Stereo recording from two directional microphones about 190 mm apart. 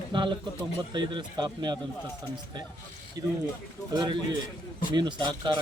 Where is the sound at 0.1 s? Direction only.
25° right (ahead or behind).